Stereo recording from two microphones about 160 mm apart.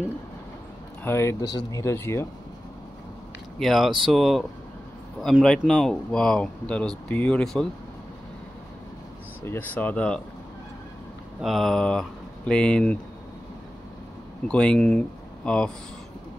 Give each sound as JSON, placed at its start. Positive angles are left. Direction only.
{"t": 1.0, "sound": "speech", "side_deg": 15}
{"t": 3.5, "sound": "speech", "side_deg": 0}
{"t": 9.4, "sound": "speech", "side_deg": 15}
{"t": 11.4, "sound": "speech", "side_deg": 0}
{"t": 14.5, "sound": "speech", "side_deg": 5}